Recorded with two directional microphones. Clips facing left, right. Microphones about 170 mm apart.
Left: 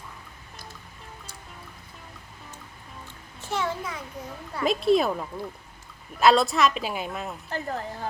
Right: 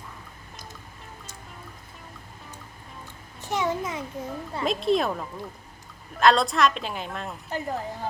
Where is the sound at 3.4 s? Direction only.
15° right (ahead or behind).